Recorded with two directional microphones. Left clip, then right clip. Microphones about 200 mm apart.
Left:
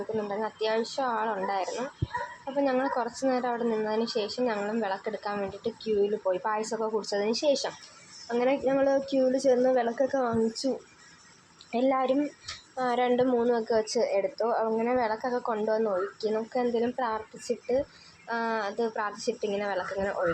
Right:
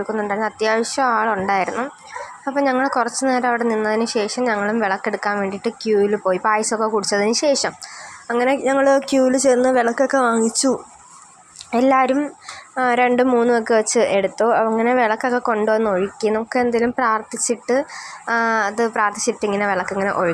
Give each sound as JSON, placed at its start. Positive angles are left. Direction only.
{"t": 0.3, "sound": "a woman's voice", "side_deg": -25}
{"t": 11.9, "sound": "a woman's voice", "side_deg": -25}